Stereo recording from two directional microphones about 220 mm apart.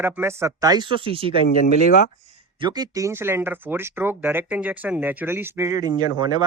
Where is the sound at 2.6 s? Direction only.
20° right (ahead or behind).